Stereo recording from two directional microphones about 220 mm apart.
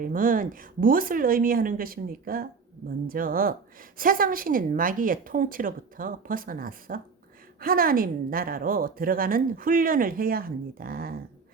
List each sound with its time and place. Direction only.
0.0 s a woman's voice: 40° right (ahead or behind)